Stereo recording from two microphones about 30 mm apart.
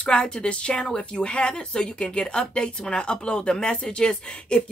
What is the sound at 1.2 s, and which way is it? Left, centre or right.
A woman's voice, left.